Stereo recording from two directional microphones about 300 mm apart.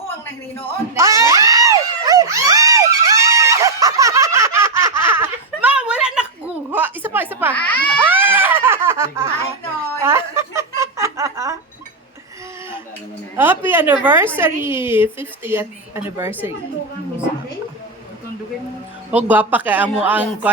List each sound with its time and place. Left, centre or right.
0.9 s screaming: centre
7.5 s baby cry: centre
8.0 s a sound: centre
10.0 s snicker: centre
13.3 s a sound: centre
14.3 s a woman's voice: centre
19.1 s a man's voice: centre